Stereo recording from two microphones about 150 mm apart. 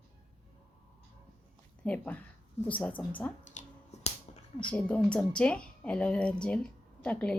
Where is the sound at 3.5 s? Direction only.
50° left (ahead or behind).